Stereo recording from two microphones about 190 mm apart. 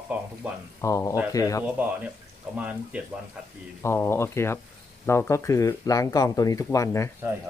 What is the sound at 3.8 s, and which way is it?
Speech, 15° left (ahead or behind).